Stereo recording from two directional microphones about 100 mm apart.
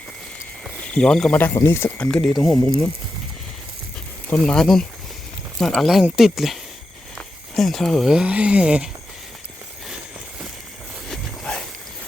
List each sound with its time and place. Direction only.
0.9 s speech: 10° left (ahead or behind)
1.6 s speech: 20° left (ahead or behind)
2.0 s speech: 5° left (ahead or behind)
4.4 s speech: 5° left (ahead or behind)
11.1 s a sound: 5° left (ahead or behind)